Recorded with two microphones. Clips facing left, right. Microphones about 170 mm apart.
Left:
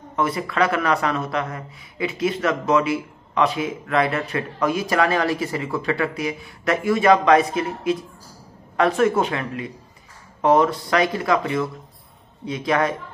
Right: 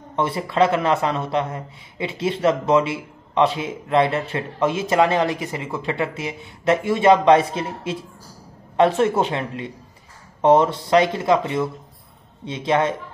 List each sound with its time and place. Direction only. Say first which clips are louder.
0.1 s speech: right 1 dB; 30° right (ahead or behind)